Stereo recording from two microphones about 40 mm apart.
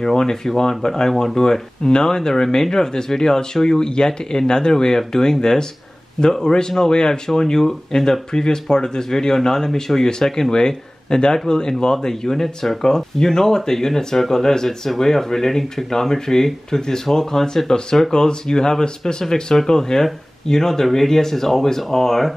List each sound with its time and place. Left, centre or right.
0.0 s speech: centre
10.5 s speech: centre